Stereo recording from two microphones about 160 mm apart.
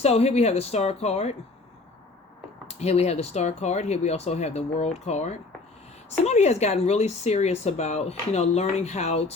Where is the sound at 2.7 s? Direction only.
40° left (ahead or behind).